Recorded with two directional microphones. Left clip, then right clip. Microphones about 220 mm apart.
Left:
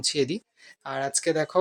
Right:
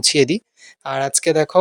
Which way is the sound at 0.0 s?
35° right (ahead or behind).